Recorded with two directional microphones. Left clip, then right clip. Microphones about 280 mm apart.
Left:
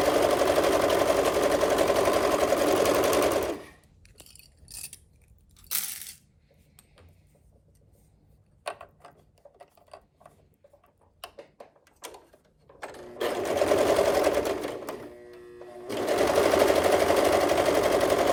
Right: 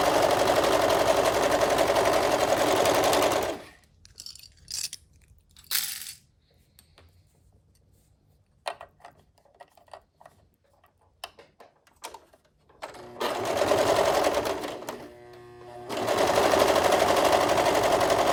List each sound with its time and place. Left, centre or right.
0.0 s sewing machine: centre
4.3 s a sound: right
5.5 s crushing: right
8.6 s mechanisms: centre
9.6 s a sound: centre
11.9 s sewing machine: centre